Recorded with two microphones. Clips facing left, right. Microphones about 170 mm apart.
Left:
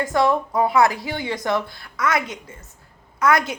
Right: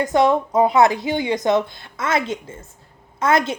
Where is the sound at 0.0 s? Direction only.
20° right (ahead or behind).